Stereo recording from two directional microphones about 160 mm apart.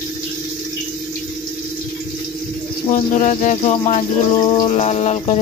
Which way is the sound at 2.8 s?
50° left (ahead or behind).